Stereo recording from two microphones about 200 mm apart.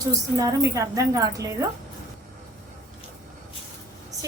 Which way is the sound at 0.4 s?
15° right (ahead or behind).